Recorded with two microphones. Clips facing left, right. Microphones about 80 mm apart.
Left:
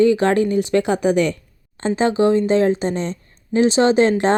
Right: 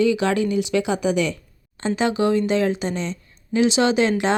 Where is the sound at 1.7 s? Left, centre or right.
Left.